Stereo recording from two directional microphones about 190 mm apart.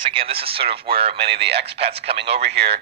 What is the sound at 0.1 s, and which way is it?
Speech, 30° right (ahead or behind).